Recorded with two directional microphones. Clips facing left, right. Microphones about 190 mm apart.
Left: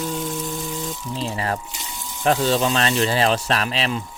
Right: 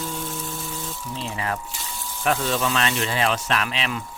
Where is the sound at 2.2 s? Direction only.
35° left (ahead or behind).